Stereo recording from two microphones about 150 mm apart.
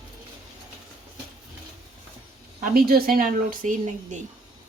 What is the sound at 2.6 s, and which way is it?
Speech, 80° right.